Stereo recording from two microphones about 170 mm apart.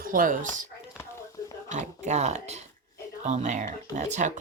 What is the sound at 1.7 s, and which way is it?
Speech, 45° right (ahead or behind).